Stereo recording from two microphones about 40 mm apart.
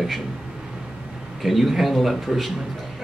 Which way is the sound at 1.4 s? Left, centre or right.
Centre.